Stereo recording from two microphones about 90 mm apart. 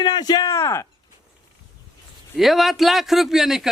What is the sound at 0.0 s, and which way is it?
Speech, 50° left (ahead or behind).